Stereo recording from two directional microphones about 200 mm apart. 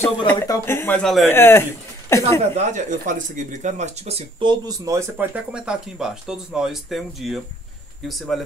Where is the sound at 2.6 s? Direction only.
35° right (ahead or behind).